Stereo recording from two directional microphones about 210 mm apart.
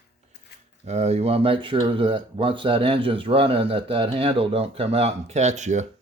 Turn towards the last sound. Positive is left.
turn(degrees=-35)  # may be behind; listen again after turning